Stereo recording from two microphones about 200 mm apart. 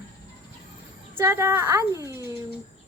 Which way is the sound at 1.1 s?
15° right (ahead or behind).